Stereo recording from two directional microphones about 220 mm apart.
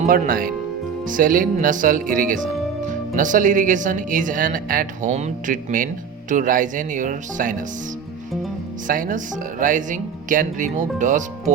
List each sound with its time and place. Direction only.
0.0 s speech: 40° right (ahead or behind)
8.9 s speech: 35° right (ahead or behind)